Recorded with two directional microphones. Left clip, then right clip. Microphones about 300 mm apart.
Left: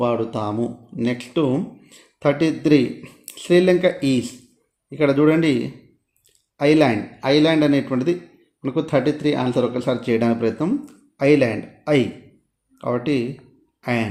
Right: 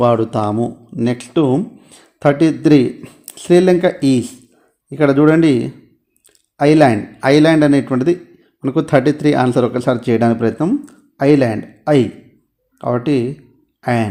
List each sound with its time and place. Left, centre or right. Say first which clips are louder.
0.0 s speech: right 7 dB; right